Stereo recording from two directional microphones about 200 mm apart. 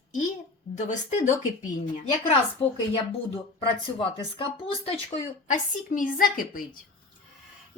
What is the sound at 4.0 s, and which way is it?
Speech, 25° left (ahead or behind).